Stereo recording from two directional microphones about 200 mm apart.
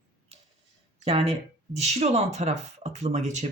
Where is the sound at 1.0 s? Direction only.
30° right (ahead or behind).